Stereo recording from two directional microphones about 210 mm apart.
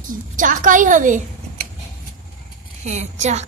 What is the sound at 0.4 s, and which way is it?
Speech, 40° right (ahead or behind).